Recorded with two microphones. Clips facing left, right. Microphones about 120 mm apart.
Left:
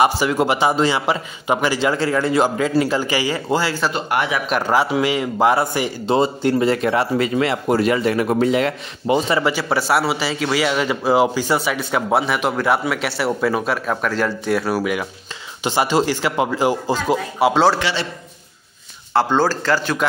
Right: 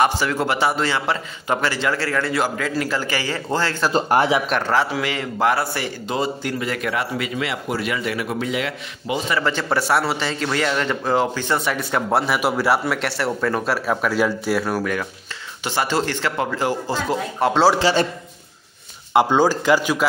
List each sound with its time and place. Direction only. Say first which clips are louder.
0.0 s a man's voice: left 3 dB; 15° left (ahead or behind)
3.9 s speech: right 4 dB; 35° right (ahead or behind)
4.5 s a man's voice: left 2 dB; 10° left (ahead or behind); by 9.2 s 40° left (ahead or behind)
9.4 s a man's voice: left 2 dB; 10° left (ahead or behind)
13.7 s a man's voice: right 1 dB; 5° right (ahead or behind); by 17.5 s 15° left (ahead or behind)
17.7 s speech: right 5 dB; 40° right (ahead or behind)
19.1 s a man's voice: right 1 dB; 15° right (ahead or behind)